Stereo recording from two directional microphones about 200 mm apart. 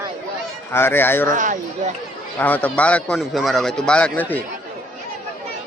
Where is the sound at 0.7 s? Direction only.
10° left (ahead or behind).